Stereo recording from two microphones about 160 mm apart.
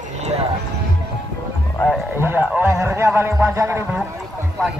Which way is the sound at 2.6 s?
15° right (ahead or behind).